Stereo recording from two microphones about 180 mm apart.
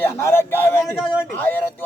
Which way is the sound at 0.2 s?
15° left (ahead or behind).